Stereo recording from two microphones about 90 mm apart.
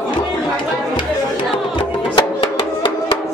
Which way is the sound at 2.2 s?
60° left (ahead or behind).